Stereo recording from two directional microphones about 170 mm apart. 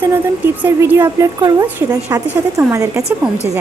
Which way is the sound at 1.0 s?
25° right (ahead or behind).